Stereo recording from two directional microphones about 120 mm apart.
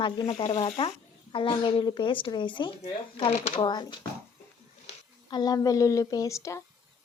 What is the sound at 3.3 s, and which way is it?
Speech, 90° left.